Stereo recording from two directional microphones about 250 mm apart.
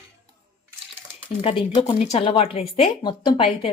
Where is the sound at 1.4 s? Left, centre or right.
Left.